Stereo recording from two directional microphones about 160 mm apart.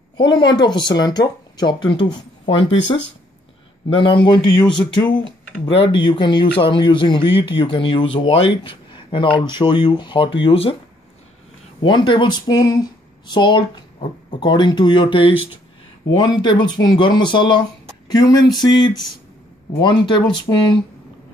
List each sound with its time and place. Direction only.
0.2 s speech: 25° left (ahead or behind)
11.8 s speech: 30° left (ahead or behind)